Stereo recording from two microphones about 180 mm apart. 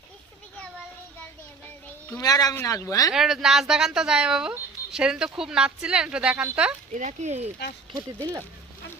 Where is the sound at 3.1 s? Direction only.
Centre (ahead or behind).